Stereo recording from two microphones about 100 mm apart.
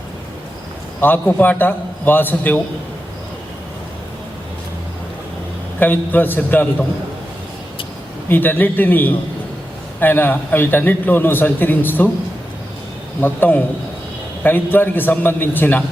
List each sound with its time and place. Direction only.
1.0 s a man's voice: 20° left (ahead or behind)
5.8 s a man's voice: 20° left (ahead or behind)
8.3 s a man's voice: 20° left (ahead or behind)
13.2 s a man's voice: 20° left (ahead or behind)